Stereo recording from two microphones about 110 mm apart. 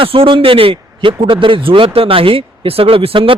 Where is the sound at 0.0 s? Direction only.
55° right (ahead or behind).